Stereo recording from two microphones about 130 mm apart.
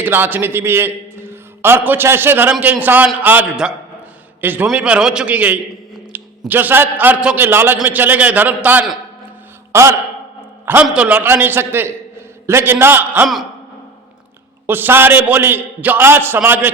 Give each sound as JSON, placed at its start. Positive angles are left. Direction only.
{"t": 0.0, "sound": "a man's voice", "side_deg": -15}
{"t": 6.1, "sound": "a sound", "side_deg": -15}
{"t": 6.5, "sound": "a man's voice", "side_deg": -15}
{"t": 10.8, "sound": "a man's voice", "side_deg": -10}
{"t": 14.7, "sound": "a man's voice", "side_deg": -15}